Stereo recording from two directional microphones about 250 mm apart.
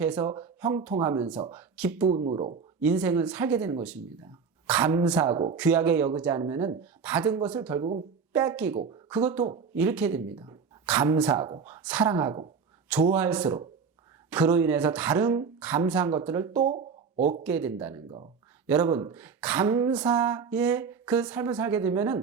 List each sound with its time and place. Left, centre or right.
0.0 s speech: centre
2.0 s speech: right
2.8 s speech: centre
16.6 s a sound: right
17.4 s speech: centre